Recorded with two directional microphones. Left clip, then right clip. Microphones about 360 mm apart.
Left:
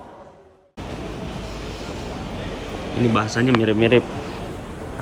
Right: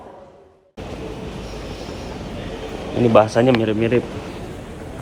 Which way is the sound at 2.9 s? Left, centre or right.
Centre.